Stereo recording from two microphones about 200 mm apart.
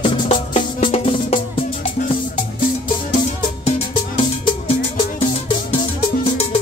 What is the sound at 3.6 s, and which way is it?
Music, 30° left (ahead or behind).